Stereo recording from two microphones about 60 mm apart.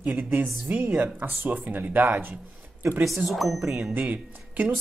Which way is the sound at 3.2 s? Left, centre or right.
Centre.